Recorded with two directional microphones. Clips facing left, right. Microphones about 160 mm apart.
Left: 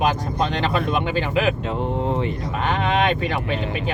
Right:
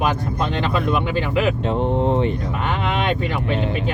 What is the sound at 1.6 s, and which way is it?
Speech, 20° right (ahead or behind).